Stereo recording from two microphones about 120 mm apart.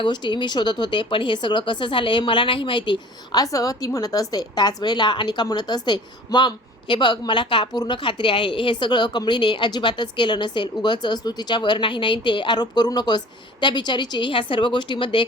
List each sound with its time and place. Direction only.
0.0 s speech: 40° left (ahead or behind)
3.4 s a woman's voice: 30° left (ahead or behind)